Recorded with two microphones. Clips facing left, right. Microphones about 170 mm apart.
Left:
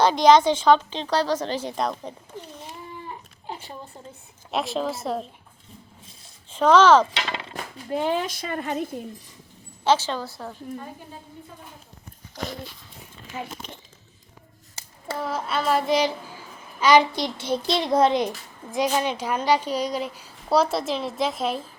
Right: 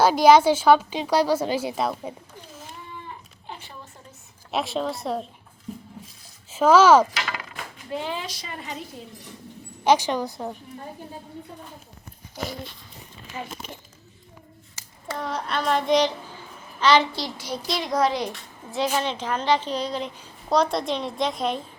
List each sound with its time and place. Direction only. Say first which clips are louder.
0.0 s a woman's voice: right 1 dB; 5° right (ahead or behind)
3.5 s a sound: left 4 dB; 35° left (ahead or behind)
4.5 s a woman's voice: even; centre (ahead or behind)
6.5 s speech: even; 5° right (ahead or behind)
7.1 s a sound: left 1 dB; 25° left (ahead or behind)
7.5 s speech: left 3 dB; 40° left (ahead or behind)
9.8 s a woman's voice: right 2 dB; 15° right (ahead or behind)
13.6 s a woman's voice: right 2 dB; 5° right (ahead or behind)
15.2 s a woman's voice: left 1 dB; 5° left (ahead or behind); by 18.3 s 25° left (ahead or behind)
18.9 s a woman's voice: left 1 dB; 10° left (ahead or behind)